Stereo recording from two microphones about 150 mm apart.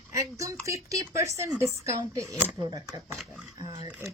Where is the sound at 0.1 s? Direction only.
20° right (ahead or behind).